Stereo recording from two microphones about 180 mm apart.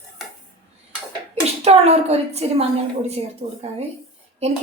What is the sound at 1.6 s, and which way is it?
A woman's voice, 35° right (ahead or behind).